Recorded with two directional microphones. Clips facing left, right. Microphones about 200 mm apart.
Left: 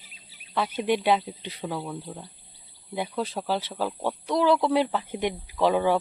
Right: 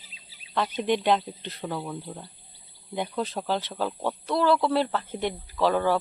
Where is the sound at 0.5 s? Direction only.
10° left (ahead or behind).